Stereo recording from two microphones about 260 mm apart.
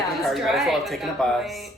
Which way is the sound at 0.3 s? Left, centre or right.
Centre.